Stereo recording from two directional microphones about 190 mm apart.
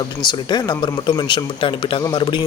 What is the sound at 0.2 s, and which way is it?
A man's voice, 20° left (ahead or behind).